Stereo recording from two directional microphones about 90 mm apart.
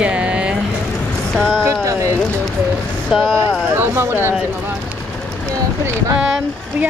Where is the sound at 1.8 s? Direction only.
35° right (ahead or behind).